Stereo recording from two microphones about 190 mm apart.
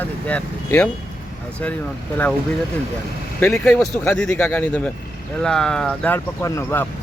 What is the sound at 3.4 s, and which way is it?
Speech, 5° left (ahead or behind).